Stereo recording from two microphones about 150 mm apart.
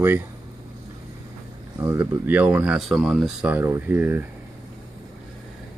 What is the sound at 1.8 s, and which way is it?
Speech, 10° right (ahead or behind).